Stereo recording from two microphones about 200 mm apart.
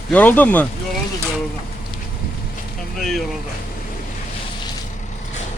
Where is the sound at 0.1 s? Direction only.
5° left (ahead or behind).